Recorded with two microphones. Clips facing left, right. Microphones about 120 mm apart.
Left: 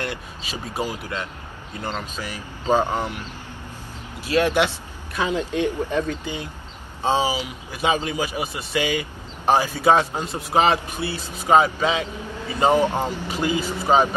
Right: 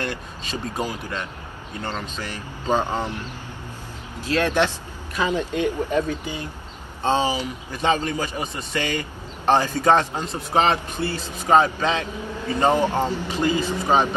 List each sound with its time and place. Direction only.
0.0 s a man's voice: 5° left (ahead or behind)
2.0 s a man's voice: 10° left (ahead or behind)
4.2 s speech: 15° left (ahead or behind)
5.5 s speech: 10° right (ahead or behind)
7.0 s a man's voice: 10° left (ahead or behind)